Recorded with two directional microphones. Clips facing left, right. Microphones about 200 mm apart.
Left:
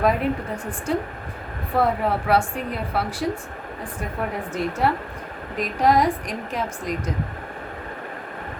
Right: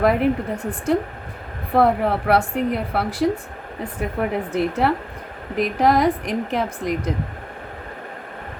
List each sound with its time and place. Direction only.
0.0 s a woman's voice: 65° right (ahead or behind)